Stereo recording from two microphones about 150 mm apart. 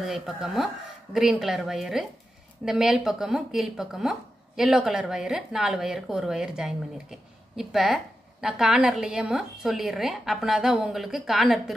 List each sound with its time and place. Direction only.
0.0 s speech: 5° right (ahead or behind)